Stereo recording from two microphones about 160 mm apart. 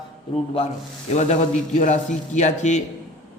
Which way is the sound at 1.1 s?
45° left (ahead or behind).